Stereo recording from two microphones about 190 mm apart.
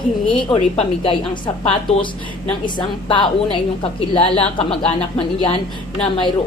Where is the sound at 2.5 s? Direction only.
25° left (ahead or behind).